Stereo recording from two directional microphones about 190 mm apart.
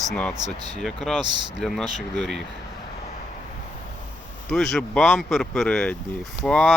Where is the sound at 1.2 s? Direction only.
25° right (ahead or behind).